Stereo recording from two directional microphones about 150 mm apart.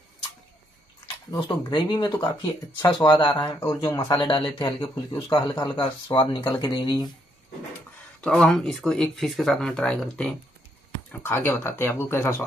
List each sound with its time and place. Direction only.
1.4 s speech: 30° left (ahead or behind)
8.2 s speech: 5° left (ahead or behind)